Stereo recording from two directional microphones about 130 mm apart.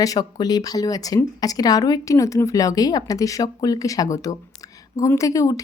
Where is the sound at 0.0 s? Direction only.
30° left (ahead or behind).